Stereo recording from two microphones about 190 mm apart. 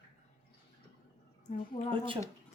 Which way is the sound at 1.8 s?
25° left (ahead or behind).